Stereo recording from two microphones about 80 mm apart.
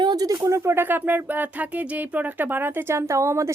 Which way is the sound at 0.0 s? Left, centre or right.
Right.